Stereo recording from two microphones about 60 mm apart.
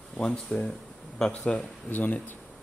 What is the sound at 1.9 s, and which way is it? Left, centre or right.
Speech, left.